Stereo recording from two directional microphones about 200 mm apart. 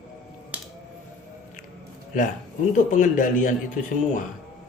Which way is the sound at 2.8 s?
40° left (ahead or behind).